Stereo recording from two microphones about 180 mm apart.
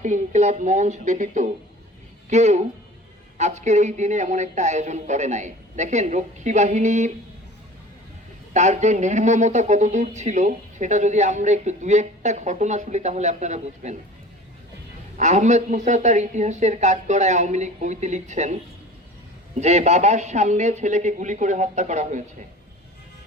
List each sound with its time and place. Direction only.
0.0 s a woman's voice: 40° right (ahead or behind)
8.5 s speech: 40° right (ahead or behind)
15.2 s speech: 40° right (ahead or behind)